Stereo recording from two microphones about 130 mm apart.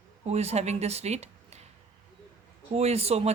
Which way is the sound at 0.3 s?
55° right (ahead or behind).